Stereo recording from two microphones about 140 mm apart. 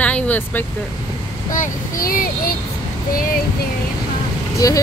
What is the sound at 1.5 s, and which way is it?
Speech, 80° left.